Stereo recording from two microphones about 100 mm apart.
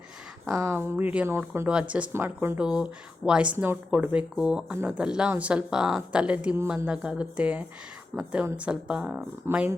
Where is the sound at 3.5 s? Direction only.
25° right (ahead or behind).